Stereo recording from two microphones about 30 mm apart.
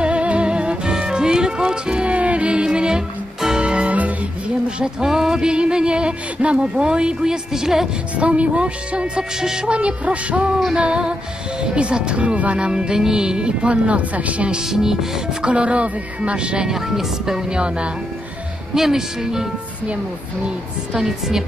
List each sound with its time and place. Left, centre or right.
0.0 s music: right
2.1 s music: right
2.6 s music: right
4.6 s speech: right
8.2 s speech: right
9.4 s speech: right
9.7 s speech: right
10.8 s speech: right
14.7 s speech: centre
15.4 s speech: right
16.6 s speech: centre
17.5 s speech: right
18.8 s speech: centre
20.9 s speech: centre